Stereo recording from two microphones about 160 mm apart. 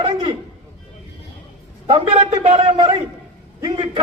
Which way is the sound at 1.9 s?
35° right (ahead or behind).